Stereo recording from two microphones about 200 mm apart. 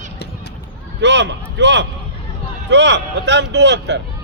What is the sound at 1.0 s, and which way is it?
A man's voice, 60° right (ahead or behind).